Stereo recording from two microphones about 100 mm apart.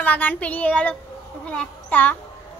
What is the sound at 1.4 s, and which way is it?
Speech, 15° left (ahead or behind).